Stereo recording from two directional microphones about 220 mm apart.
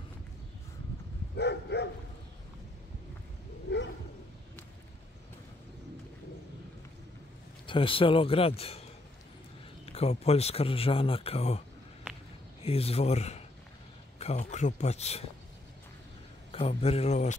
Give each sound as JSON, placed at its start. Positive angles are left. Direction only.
{"t": 1.3, "sound": "dog", "side_deg": 50}
{"t": 7.6, "sound": "speech", "side_deg": 25}
{"t": 9.8, "sound": "speech", "side_deg": 25}
{"t": 12.6, "sound": "speech", "side_deg": 25}
{"t": 16.5, "sound": "speech", "side_deg": 25}